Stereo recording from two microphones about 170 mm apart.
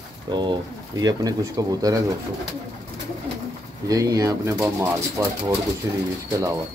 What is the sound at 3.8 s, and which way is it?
Speech, 20° right (ahead or behind).